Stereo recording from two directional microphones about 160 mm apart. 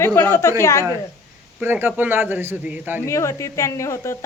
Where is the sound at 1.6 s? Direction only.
10° right (ahead or behind).